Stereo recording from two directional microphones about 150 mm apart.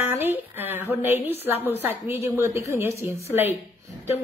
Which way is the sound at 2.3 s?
20° right (ahead or behind).